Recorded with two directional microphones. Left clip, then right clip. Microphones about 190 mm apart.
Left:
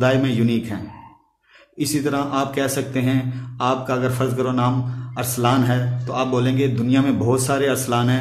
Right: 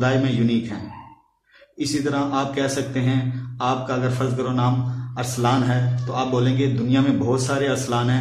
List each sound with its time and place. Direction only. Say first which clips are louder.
0.0 s speech: left 3 dB; 45° left (ahead or behind)
1.8 s speech: left 1 dB; 45° left (ahead or behind)